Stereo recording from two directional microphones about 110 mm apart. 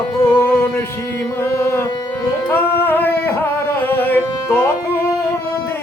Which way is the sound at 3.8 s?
15° left (ahead or behind).